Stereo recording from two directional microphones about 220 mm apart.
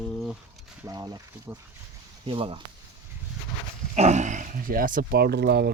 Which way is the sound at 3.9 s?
30° right (ahead or behind).